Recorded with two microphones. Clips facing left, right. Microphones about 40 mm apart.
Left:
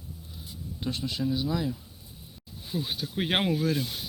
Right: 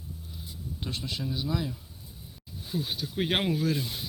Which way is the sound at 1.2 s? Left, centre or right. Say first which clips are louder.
Left 8 dB; centre.